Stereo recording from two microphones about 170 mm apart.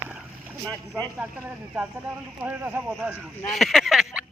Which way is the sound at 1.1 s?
10° right (ahead or behind).